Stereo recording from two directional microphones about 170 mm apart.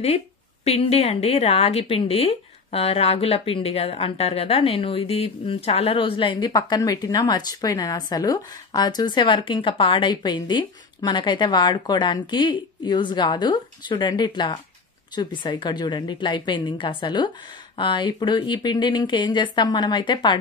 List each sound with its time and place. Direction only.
0.7 s a woman's voice: 35° left (ahead or behind)